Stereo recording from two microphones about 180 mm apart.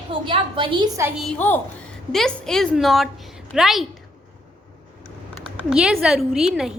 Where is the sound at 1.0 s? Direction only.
10° right (ahead or behind).